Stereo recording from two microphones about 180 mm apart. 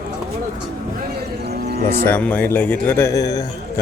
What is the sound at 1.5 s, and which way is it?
Cattle, 60° right (ahead or behind).